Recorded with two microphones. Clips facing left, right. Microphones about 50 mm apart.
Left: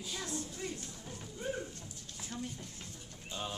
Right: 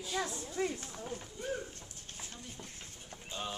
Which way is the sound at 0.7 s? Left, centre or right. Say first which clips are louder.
Right 4 dB; right.